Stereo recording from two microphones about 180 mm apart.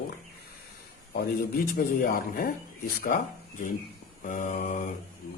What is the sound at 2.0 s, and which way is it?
Speech, 55° left (ahead or behind).